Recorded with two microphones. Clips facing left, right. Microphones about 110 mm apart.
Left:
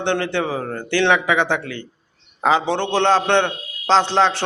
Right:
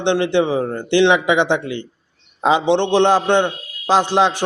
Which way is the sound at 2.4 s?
20° right (ahead or behind).